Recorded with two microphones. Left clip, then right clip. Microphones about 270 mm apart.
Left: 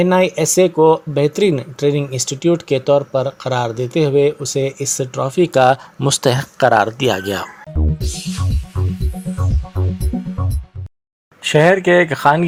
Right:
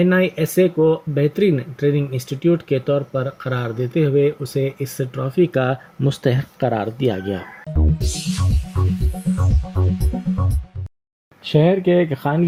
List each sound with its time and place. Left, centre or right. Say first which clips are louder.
0.0 s speech: left 4 dB; left
7.0 s speech: left 4 dB; left
7.8 s music: even; centre
11.5 s speech: left 5 dB; left